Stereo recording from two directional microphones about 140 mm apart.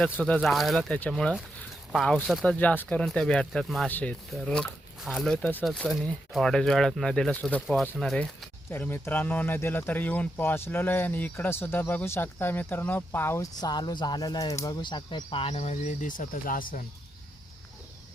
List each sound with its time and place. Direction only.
0.0 s speech: 5° left (ahead or behind); by 15.7 s 45° left (ahead or behind)
15.7 s speech: 60° left (ahead or behind); by 16.8 s 80° left